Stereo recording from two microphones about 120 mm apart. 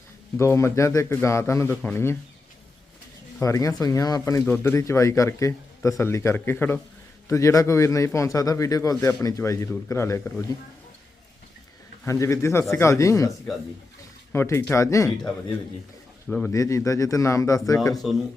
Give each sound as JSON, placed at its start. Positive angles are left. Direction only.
{"t": 0.3, "sound": "speech", "side_deg": 25}
{"t": 3.4, "sound": "speech", "side_deg": 25}
{"t": 4.4, "sound": "speech", "side_deg": 20}
{"t": 12.0, "sound": "speech", "side_deg": 25}
{"t": 14.3, "sound": "speech", "side_deg": 20}
{"t": 16.5, "sound": "speech", "side_deg": 25}
{"t": 18.0, "sound": "speech", "side_deg": 0}